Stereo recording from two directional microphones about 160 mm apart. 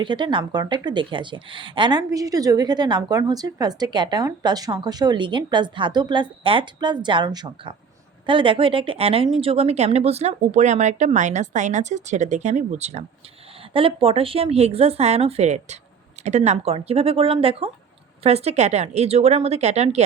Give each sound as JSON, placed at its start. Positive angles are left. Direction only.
{"t": 0.0, "sound": "a woman's voice", "side_deg": -30}